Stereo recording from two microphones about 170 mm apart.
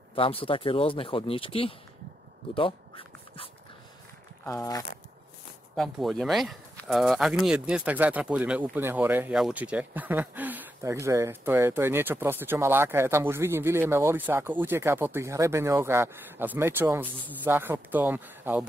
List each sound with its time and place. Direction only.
0.1 s speech: 35° left (ahead or behind)
2.5 s a sound: 30° left (ahead or behind)
5.8 s speech: centre (ahead or behind)